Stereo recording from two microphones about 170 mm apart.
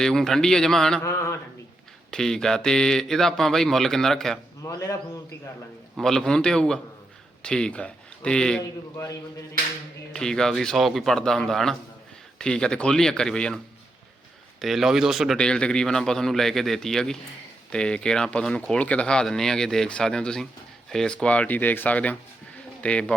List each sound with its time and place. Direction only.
0.0 s speech: 5° left (ahead or behind)
1.0 s a sound: 15° left (ahead or behind)
2.0 s speech: 5° left (ahead or behind)
4.6 s speech: 20° left (ahead or behind)
6.0 s speech: 5° left (ahead or behind)
10.1 s speech: 5° left (ahead or behind)
14.6 s speech: centre (ahead or behind)